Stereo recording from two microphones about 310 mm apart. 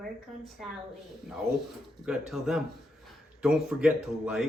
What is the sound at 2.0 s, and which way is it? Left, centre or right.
Speech, centre.